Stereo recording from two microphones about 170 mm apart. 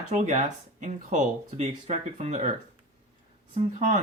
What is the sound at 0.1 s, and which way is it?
Speech, 45° right (ahead or behind).